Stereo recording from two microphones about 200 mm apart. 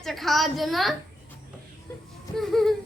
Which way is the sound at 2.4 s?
Centre (ahead or behind).